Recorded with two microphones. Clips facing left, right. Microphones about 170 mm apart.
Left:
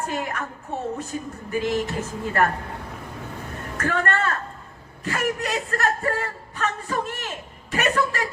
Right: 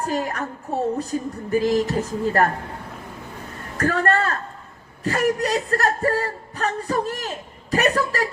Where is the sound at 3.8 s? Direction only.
35° right (ahead or behind).